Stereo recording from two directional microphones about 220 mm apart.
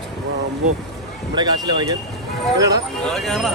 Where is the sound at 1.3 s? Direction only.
20° right (ahead or behind).